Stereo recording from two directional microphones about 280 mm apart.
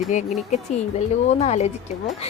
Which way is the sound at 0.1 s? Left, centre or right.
Left.